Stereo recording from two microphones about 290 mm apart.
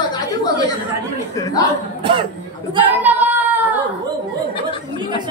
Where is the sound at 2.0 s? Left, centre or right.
Centre.